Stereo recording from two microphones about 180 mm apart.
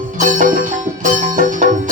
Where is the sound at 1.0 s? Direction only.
45° right (ahead or behind).